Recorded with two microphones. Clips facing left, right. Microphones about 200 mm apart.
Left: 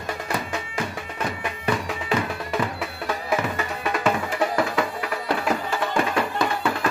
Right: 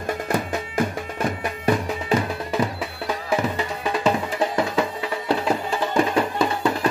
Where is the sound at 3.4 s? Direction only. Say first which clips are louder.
Right 2 dB; 20° right (ahead or behind).